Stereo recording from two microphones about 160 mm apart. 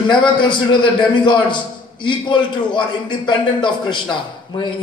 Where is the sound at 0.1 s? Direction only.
30° left (ahead or behind).